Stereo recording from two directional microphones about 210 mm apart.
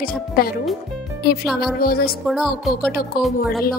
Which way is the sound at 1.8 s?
45° left (ahead or behind).